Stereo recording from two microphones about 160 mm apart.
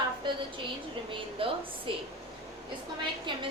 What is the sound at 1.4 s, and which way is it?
Speech, 35° right (ahead or behind).